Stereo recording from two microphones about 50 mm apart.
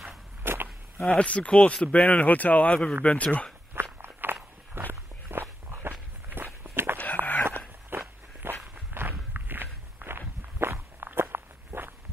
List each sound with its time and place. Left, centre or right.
0.4 s a sound: right
1.0 s speech: left
2.0 s speech: left
4.0 s walk: right
7.0 s a sound: left
7.9 s walk: right